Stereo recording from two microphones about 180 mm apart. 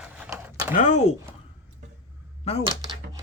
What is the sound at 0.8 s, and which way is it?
Speech, 45° left (ahead or behind).